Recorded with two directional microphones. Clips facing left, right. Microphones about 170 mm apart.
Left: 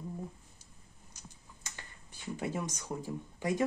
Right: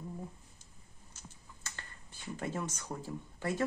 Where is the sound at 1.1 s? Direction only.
15° left (ahead or behind).